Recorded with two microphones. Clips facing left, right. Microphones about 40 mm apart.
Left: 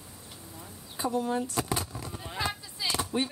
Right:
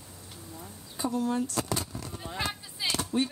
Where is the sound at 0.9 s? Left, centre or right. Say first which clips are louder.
Even; centre.